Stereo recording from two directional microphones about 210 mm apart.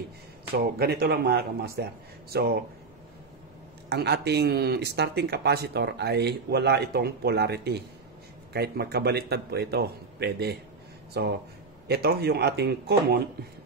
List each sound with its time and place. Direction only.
0.7 s speech: 45° right (ahead or behind)
3.9 s speech: 50° right (ahead or behind)